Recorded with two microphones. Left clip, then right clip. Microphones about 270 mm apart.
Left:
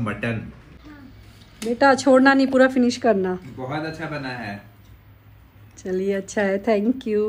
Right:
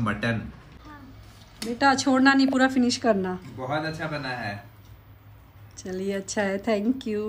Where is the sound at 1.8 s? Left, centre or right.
Centre.